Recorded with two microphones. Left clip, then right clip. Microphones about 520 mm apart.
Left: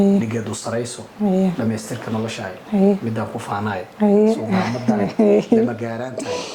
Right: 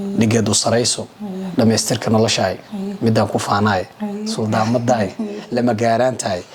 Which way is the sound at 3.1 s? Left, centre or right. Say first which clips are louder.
Right 8 dB; right.